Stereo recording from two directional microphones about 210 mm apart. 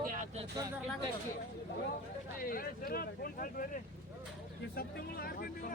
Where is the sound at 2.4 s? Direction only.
45° left (ahead or behind).